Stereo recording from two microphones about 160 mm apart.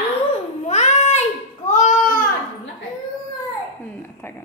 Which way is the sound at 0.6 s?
45° left (ahead or behind).